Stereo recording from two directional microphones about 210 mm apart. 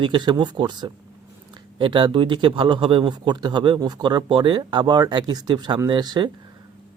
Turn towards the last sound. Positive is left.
turn(degrees=-20)  # may be behind; listen again after turning